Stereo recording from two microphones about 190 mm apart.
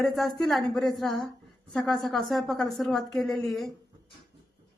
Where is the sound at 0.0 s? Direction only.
Centre (ahead or behind).